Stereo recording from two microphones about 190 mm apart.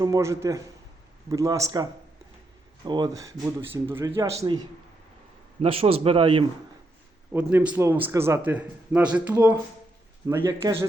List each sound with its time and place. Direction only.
0.0 s a man's voice: 15° right (ahead or behind)
4.3 s speech: 35° right (ahead or behind)
5.6 s speech: 30° right (ahead or behind)
7.3 s a man's voice: 5° right (ahead or behind)